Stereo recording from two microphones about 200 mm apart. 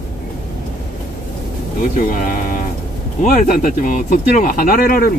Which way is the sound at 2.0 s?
45° left (ahead or behind).